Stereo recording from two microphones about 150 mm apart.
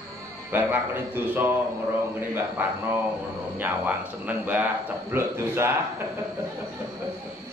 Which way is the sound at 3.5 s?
10° right (ahead or behind).